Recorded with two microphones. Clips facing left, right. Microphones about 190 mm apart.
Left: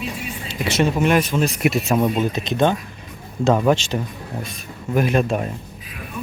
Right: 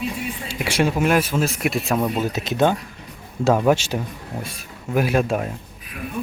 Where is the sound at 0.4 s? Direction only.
10° right (ahead or behind).